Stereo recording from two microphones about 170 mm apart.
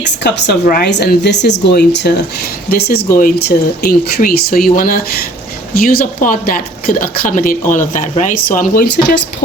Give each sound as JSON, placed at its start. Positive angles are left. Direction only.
{"t": 0.0, "sound": "a woman's voice", "side_deg": 85}